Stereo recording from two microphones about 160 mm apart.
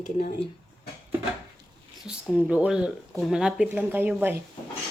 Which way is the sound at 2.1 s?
5° right (ahead or behind).